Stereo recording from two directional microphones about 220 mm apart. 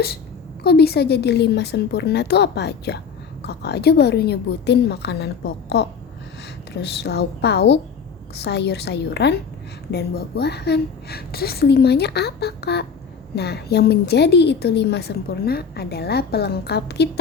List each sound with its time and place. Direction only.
0.6 s a woman's voice: 45° left (ahead or behind)